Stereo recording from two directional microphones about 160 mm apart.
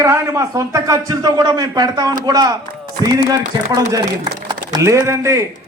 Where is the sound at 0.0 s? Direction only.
20° right (ahead or behind).